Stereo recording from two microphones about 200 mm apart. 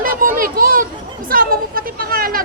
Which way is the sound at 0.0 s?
45° right (ahead or behind).